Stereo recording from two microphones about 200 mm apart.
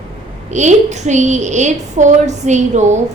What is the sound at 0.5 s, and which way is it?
A woman's voice, 35° right (ahead or behind).